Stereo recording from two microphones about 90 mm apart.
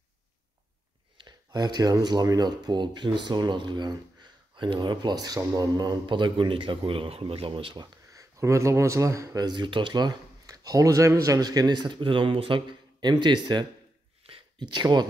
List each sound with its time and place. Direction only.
1.1 s speech: 50° right (ahead or behind)
6.0 s speech: 65° right (ahead or behind); by 7.8 s 80° right
7.8 s speech: 45° right (ahead or behind)